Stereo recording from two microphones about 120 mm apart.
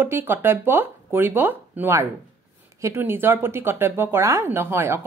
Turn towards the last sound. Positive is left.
turn(degrees=-20)  # may be behind; listen again after turning